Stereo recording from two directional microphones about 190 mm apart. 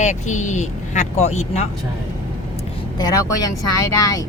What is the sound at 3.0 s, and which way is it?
Speech, 20° left (ahead or behind).